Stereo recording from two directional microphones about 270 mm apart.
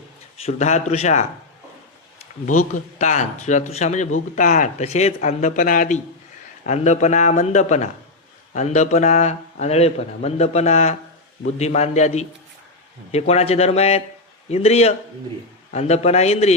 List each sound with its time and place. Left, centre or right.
0.4 s speech: left
2.7 s speech: left